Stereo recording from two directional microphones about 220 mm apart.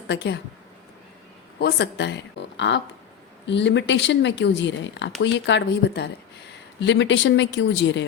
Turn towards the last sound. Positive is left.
turn(degrees=55)  # may be behind; listen again after turning